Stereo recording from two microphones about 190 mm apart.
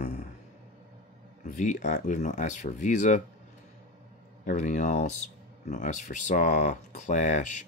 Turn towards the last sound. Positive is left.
turn(degrees=40)  # may be behind; listen again after turning